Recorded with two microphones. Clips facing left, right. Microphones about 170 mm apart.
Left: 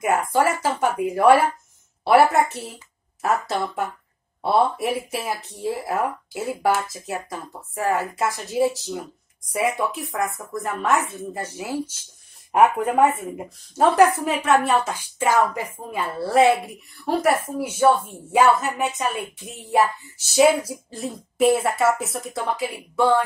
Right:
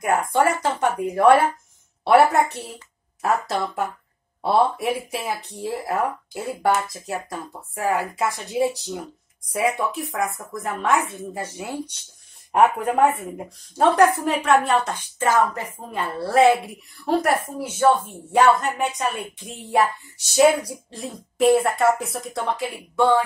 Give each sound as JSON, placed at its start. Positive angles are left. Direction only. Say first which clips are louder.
{"t": 0.0, "sound": "a woman's voice", "louder": "even", "side_deg": 5}
{"t": 16.0, "sound": "a woman's voice", "louder": "right 1 dB", "side_deg": 0}